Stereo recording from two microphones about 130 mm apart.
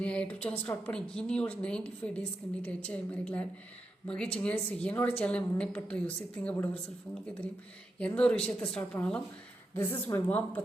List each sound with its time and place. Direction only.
0.0 s a woman's voice: 10° left (ahead or behind)
7.9 s a woman's voice: 10° left (ahead or behind)
9.7 s a woman's voice: 20° left (ahead or behind)